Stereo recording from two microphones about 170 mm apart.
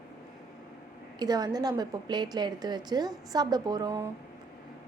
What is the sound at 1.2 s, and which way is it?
A woman's voice, 25° right (ahead or behind).